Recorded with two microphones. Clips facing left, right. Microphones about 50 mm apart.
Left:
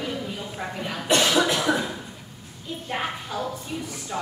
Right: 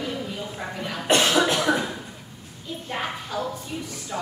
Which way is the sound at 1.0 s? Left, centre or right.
Right.